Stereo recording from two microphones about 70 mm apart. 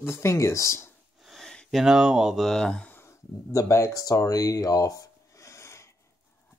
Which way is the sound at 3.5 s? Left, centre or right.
Left.